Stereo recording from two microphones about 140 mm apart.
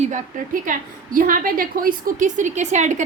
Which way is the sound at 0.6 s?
75° right (ahead or behind).